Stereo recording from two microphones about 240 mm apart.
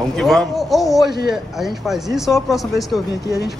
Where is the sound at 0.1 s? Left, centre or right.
Centre.